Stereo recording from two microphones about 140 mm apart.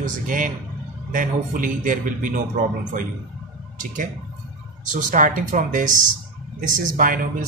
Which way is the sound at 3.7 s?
65° right (ahead or behind).